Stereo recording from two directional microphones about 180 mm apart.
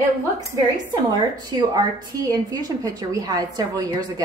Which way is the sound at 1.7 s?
20° right (ahead or behind).